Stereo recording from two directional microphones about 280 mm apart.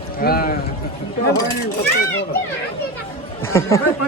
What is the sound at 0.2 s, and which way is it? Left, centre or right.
Speech, left.